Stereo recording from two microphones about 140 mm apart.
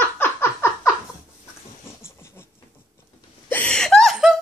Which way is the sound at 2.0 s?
20° left (ahead or behind).